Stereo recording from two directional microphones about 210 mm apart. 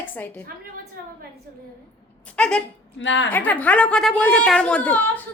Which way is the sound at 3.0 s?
60° left (ahead or behind).